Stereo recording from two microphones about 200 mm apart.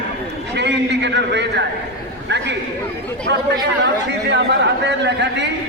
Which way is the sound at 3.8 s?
60° right (ahead or behind).